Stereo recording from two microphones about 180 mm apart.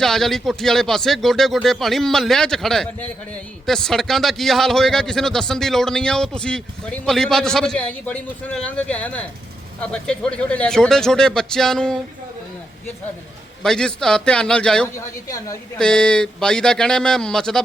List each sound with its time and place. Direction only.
0.0 s speech: centre (ahead or behind)
13.6 s speech: 5° left (ahead or behind)
14.9 s a woman's voice: 20° left (ahead or behind)
15.8 s speech: 5° left (ahead or behind)